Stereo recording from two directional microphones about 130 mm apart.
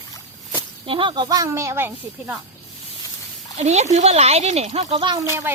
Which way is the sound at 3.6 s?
60° right (ahead or behind).